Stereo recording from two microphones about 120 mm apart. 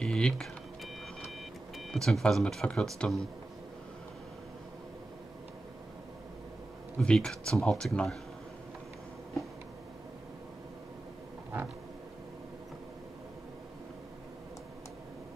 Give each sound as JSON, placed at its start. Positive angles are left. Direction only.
{"t": 0.0, "sound": "a sound", "side_deg": 5}
{"t": 1.8, "sound": "speech", "side_deg": 5}
{"t": 7.0, "sound": "speech", "side_deg": 5}